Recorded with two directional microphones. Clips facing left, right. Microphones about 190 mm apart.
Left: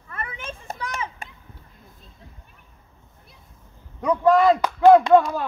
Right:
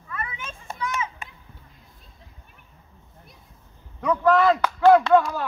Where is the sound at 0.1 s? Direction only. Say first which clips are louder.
Left 1 dB; 45° left (ahead or behind).